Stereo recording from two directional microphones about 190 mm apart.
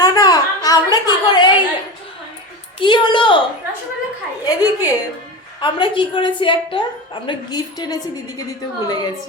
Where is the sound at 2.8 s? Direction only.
25° left (ahead or behind).